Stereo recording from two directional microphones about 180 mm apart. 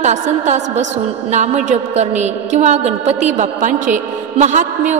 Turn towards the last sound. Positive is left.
turn(degrees=-40)  # may be behind; listen again after turning